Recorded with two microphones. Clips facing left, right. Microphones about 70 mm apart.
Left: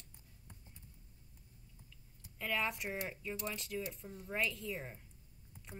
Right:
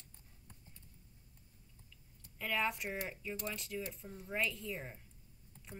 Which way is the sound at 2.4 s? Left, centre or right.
Centre.